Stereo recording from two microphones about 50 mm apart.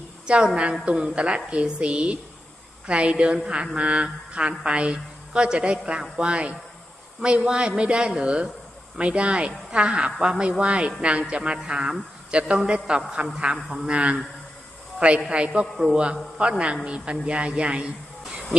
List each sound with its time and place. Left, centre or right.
0.3 s speech: right
15.3 s a man's voice: right